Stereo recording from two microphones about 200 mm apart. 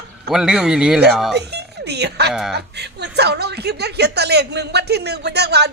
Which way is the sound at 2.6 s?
55° right (ahead or behind).